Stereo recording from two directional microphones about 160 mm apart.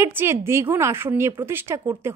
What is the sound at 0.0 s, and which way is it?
Speech, 15° right (ahead or behind).